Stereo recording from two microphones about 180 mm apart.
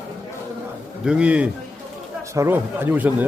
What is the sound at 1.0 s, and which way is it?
A man's voice, 5° right (ahead or behind).